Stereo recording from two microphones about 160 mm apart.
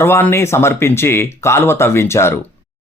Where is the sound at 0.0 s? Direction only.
15° left (ahead or behind).